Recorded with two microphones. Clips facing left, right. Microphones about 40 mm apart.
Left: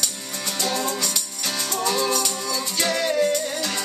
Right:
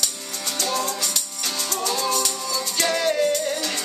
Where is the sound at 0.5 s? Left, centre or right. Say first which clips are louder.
Even; centre.